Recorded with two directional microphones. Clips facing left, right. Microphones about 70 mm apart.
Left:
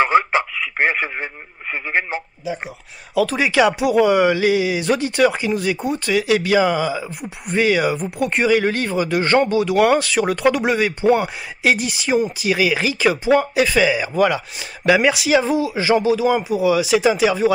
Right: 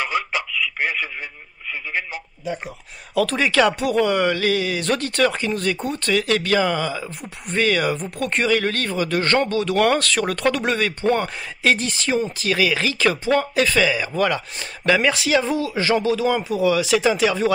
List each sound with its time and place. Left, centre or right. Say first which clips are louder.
0.0 s radio: left 8 dB; left
1.7 s speech: left 6 dB; left
3.2 s speech: left 2 dB; centre